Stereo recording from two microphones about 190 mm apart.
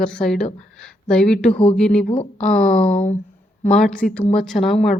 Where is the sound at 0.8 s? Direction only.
5° left (ahead or behind).